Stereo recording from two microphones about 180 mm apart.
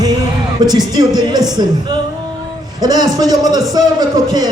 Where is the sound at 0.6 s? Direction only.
20° right (ahead or behind).